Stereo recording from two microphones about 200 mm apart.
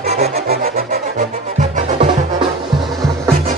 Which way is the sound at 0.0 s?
35° right (ahead or behind).